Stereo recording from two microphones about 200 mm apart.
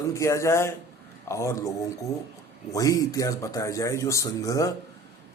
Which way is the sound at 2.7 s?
15° left (ahead or behind).